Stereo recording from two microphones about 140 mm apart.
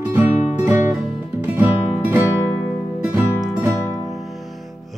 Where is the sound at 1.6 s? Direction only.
15° right (ahead or behind).